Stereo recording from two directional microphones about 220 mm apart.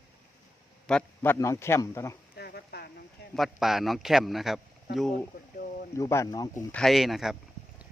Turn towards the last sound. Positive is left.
turn(degrees=0)  # may be behind; listen again after turning